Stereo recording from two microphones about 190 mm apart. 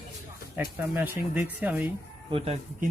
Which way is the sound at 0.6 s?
10° right (ahead or behind).